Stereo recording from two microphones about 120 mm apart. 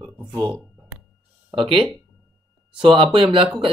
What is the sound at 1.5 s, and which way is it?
Speech, 45° right (ahead or behind).